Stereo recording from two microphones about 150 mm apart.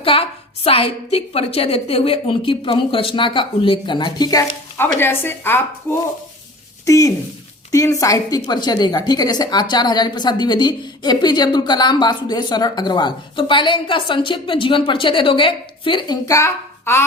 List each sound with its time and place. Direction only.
0.0 s a woman's voice: 40° left (ahead or behind); by 17.1 s 15° left (ahead or behind)